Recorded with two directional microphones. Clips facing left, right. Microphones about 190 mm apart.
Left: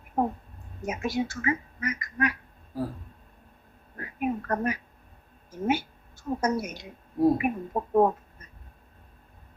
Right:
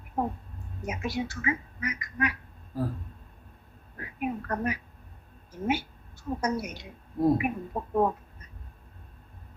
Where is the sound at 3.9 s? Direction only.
45° left (ahead or behind).